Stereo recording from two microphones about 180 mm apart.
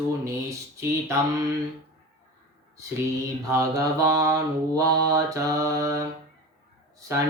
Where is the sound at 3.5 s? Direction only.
15° right (ahead or behind).